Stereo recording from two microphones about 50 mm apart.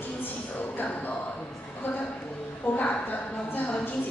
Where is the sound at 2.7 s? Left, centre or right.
Left.